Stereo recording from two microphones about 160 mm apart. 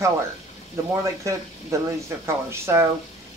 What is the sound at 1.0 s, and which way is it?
Speech, 20° right (ahead or behind).